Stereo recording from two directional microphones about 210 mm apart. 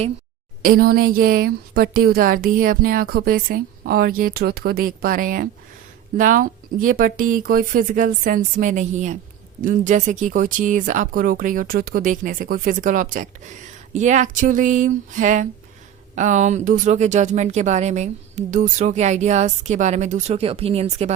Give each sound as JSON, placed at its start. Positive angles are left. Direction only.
{"t": 0.6, "sound": "a woman's voice", "side_deg": -45}